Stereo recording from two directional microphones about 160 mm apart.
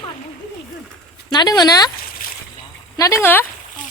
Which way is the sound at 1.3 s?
25° left (ahead or behind).